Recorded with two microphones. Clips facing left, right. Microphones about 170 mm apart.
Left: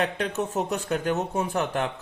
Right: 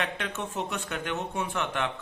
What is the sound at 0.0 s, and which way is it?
Speech, 40° left (ahead or behind).